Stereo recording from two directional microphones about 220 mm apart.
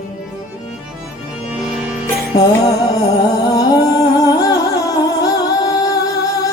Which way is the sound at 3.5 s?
15° left (ahead or behind).